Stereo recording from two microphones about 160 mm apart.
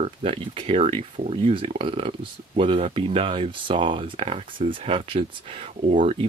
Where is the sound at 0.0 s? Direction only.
35° right (ahead or behind).